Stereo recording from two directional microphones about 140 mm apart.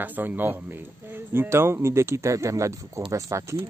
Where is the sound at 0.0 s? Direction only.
10° right (ahead or behind).